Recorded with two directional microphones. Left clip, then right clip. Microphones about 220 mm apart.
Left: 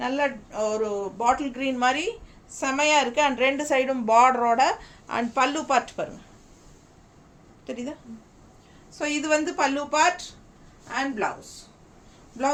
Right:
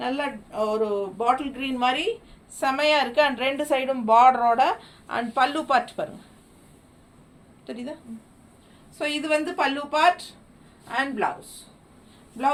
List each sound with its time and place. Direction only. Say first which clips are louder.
0.0 s a woman's voice: left 2 dB; 15° left (ahead or behind)
7.7 s a woman's voice: left 1 dB; 20° left (ahead or behind)
9.0 s a woman's voice: even; 15° left (ahead or behind)